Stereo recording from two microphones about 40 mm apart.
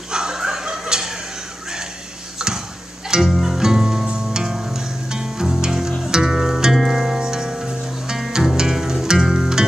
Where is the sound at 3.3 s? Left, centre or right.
Centre.